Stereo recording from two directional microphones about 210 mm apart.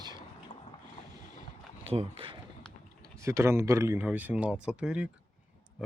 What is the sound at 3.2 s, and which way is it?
Speech, 10° right (ahead or behind).